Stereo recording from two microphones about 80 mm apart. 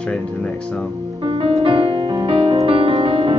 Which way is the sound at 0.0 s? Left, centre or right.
Centre.